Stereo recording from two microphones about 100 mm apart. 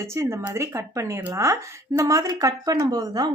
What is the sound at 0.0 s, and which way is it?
A woman's voice, 25° right (ahead or behind).